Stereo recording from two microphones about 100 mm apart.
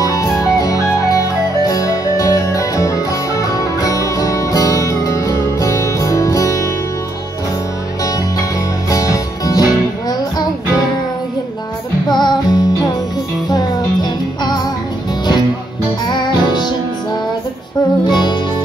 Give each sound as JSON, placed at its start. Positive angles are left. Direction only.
{"t": 0.0, "sound": "music", "side_deg": 35}
{"t": 8.9, "sound": "music", "side_deg": 35}
{"t": 12.1, "sound": "music", "side_deg": 45}
{"t": 16.1, "sound": "music", "side_deg": 50}
{"t": 18.0, "sound": "music", "side_deg": 50}